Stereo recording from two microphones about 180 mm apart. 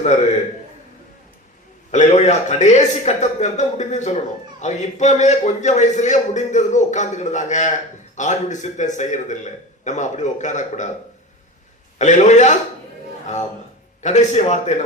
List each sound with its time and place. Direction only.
0.0 s a man's voice: 35° left (ahead or behind)
1.9 s a man's voice: 40° left (ahead or behind)
11.9 s a man's voice: 40° left (ahead or behind)
14.0 s a man's voice: 40° left (ahead or behind)